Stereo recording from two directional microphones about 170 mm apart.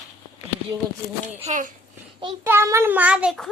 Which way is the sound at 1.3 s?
45° right (ahead or behind).